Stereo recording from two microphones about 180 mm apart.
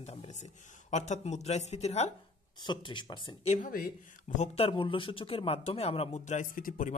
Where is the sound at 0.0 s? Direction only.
35° left (ahead or behind).